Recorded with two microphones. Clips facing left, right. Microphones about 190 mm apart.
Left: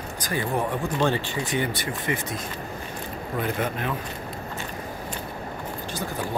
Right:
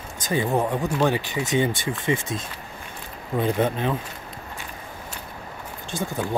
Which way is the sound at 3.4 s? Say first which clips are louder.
Right 6 dB; 25° right (ahead or behind).